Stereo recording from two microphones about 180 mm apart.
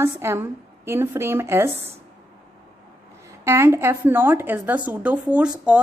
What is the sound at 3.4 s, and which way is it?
Speech, 15° right (ahead or behind).